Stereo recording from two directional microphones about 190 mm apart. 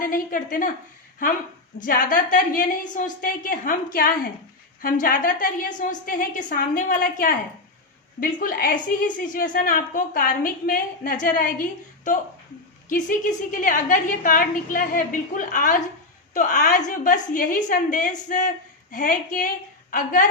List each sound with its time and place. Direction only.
0.0 s a woman's voice: 45° left (ahead or behind)
1.8 s a woman's voice: 50° left (ahead or behind)